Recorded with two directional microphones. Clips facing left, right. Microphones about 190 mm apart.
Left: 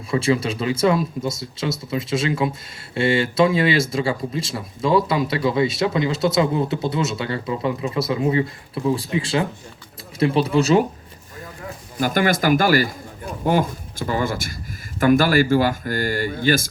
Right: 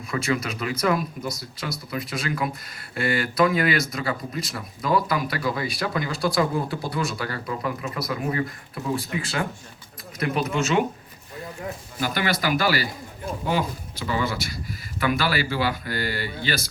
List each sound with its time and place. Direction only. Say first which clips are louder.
0.1 s speech: left 6 dB; 30° left (ahead or behind)
11.9 s speech: left 7 dB; 45° left (ahead or behind)